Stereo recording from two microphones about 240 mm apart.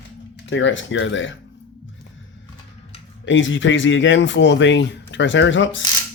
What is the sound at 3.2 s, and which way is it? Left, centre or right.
Speech, left.